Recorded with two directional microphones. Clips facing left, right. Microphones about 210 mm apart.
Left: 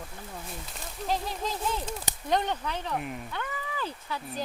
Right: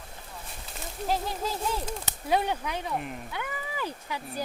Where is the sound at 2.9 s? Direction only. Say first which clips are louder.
Even; centre (ahead or behind).